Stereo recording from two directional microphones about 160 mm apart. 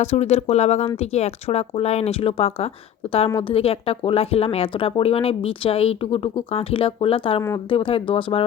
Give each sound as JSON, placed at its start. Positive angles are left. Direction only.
{"t": 0.0, "sound": "speech", "side_deg": 45}